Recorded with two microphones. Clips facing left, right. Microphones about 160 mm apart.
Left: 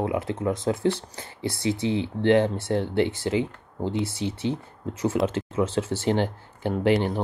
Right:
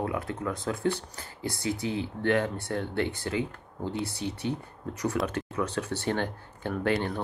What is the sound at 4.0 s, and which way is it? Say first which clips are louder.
Speech: left 5 dB; 90° left.